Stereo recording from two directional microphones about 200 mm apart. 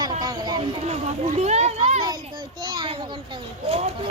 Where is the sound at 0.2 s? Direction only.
20° right (ahead or behind).